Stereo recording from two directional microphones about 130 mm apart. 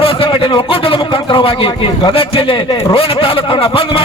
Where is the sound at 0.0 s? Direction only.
45° left (ahead or behind).